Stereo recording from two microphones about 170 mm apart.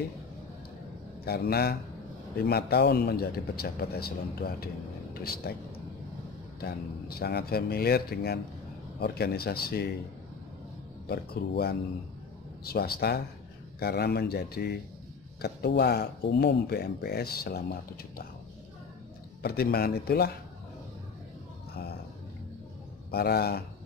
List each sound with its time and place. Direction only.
1.2 s speech: 65° left (ahead or behind)
6.6 s speech: 65° left (ahead or behind)
11.1 s speech: 65° left (ahead or behind)
19.4 s speech: 65° left (ahead or behind)
23.1 s speech: 70° left (ahead or behind)